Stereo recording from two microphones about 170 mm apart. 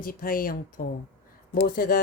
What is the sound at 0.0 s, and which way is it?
Speech, 55° left (ahead or behind).